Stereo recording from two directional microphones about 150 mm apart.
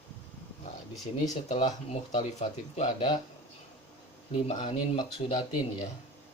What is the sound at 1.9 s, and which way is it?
Speech, 45° left (ahead or behind).